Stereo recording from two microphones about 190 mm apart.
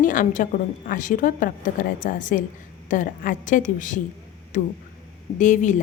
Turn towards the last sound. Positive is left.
turn(degrees=40)  # may be behind; listen again after turning